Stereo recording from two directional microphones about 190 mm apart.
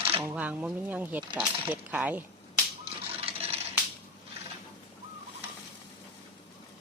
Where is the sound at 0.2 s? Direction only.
5° right (ahead or behind).